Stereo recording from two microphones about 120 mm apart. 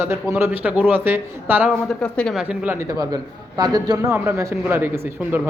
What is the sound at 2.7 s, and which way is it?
A man's voice, 30° right (ahead or behind).